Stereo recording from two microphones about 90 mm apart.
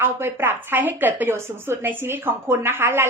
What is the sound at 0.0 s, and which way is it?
A woman's voice, 25° right (ahead or behind).